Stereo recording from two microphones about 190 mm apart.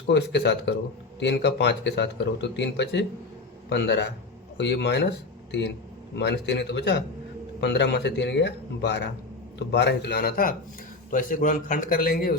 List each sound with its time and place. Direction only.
0.1 s a man's voice: 65° left (ahead or behind)